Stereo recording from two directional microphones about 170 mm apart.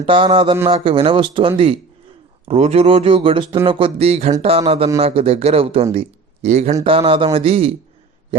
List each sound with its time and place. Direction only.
0.0 s speech: 30° right (ahead or behind)
0.5 s speech: 15° right (ahead or behind)
0.9 s speech: 30° right (ahead or behind)